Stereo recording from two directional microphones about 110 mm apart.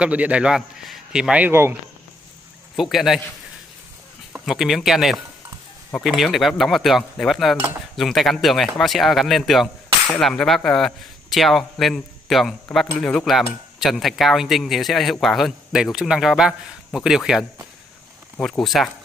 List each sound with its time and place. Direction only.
0.0 s a man's voice: 10° right (ahead or behind)
1.5 s speech: 20° right (ahead or behind)
2.7 s a man's voice: centre (ahead or behind)
4.5 s speech: centre (ahead or behind)